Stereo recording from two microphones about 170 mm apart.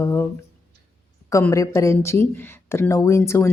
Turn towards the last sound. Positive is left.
turn(degrees=15)  # may be behind; listen again after turning